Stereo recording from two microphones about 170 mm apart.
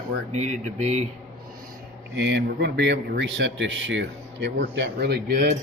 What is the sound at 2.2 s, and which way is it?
Speech, 90° right.